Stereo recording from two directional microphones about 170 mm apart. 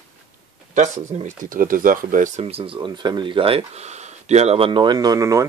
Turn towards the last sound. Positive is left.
turn(degrees=-20)  # may be behind; listen again after turning